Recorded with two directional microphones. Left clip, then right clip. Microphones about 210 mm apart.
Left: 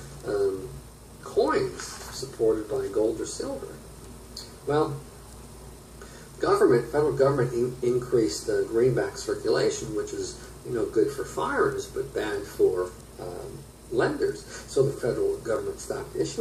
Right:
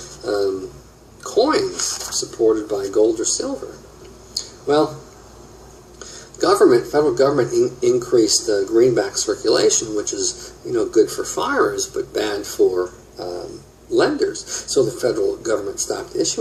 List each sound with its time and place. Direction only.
0.2 s speech: 40° right (ahead or behind)
4.7 s speech: 40° right (ahead or behind)
6.0 s speech: 40° right (ahead or behind)